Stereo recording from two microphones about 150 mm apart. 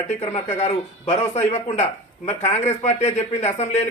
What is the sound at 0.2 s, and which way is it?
A man's voice, 45° left (ahead or behind).